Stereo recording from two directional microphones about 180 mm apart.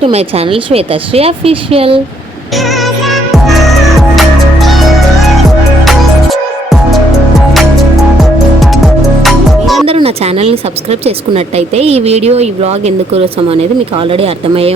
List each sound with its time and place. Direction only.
0.0 s speech: 35° right (ahead or behind)
3.1 s music: centre (ahead or behind)
5.8 s music: centre (ahead or behind)
8.2 s music: centre (ahead or behind)
9.8 s a sound: 30° right (ahead or behind)
11.0 s speech: 35° right (ahead or behind)